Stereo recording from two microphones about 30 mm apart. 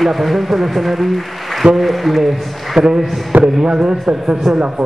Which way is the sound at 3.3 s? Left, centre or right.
Right.